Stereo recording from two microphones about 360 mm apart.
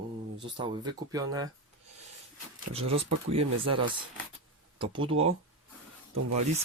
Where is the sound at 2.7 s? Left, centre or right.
Centre.